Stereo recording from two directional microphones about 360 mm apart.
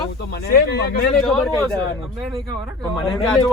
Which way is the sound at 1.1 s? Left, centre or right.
Centre.